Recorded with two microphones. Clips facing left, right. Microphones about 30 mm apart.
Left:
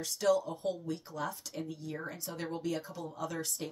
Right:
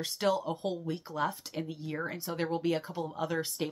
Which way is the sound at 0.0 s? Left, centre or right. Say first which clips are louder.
Even; right.